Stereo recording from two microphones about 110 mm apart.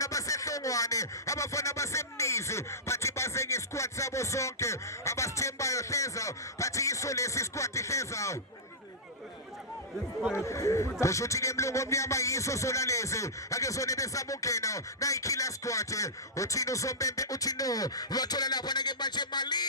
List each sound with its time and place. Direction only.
0.0 s a sound: 30° left (ahead or behind)
10.2 s speech: 5° right (ahead or behind)
10.4 s music: 30° left (ahead or behind)